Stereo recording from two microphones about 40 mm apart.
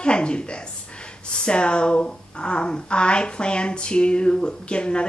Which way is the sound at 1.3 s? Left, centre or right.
Left.